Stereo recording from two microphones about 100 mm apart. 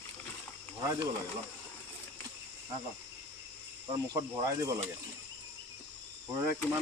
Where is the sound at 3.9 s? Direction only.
30° right (ahead or behind).